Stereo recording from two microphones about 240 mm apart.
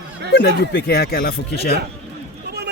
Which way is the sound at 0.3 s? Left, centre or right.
Left.